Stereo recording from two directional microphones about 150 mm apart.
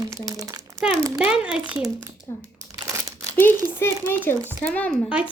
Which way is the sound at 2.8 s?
20° right (ahead or behind).